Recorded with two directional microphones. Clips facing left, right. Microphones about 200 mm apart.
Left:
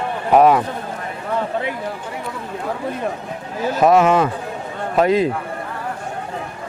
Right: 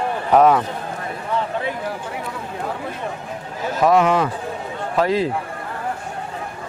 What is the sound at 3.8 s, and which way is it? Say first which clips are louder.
A man's voice: left 2 dB; 25° left (ahead or behind).